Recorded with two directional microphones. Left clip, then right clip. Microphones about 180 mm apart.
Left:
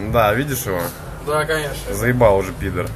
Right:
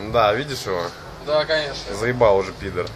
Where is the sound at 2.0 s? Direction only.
5° right (ahead or behind).